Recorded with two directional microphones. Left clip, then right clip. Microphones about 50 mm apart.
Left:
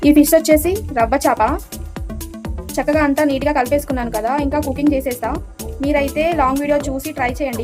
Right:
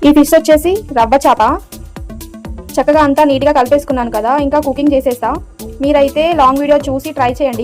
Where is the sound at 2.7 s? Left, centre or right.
Right.